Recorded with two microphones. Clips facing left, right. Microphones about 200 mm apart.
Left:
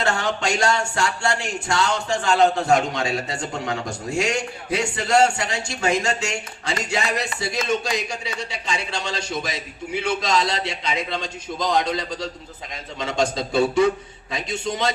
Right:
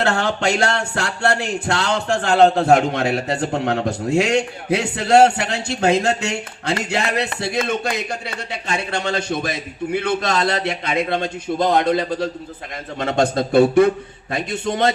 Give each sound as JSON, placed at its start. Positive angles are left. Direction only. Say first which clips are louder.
{"t": 0.0, "sound": "music", "louder": "right 4 dB", "side_deg": -60}